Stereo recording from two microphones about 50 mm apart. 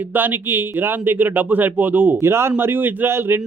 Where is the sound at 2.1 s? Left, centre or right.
Right.